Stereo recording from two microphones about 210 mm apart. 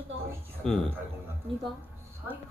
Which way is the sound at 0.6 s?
5° left (ahead or behind).